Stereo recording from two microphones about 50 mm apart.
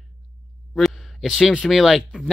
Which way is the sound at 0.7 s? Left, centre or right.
Centre.